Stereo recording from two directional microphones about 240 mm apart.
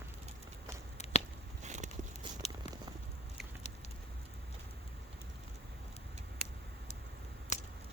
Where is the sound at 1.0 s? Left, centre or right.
Left.